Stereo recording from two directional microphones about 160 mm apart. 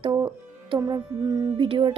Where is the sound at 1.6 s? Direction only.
30° right (ahead or behind).